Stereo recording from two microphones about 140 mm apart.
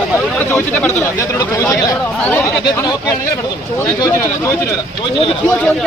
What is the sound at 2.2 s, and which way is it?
Speech, 15° left (ahead or behind).